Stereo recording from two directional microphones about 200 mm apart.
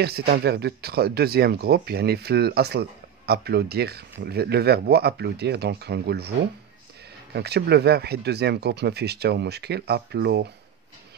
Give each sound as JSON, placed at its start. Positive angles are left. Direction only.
{"t": 0.3, "sound": "speech", "side_deg": -55}
{"t": 7.3, "sound": "speech", "side_deg": -55}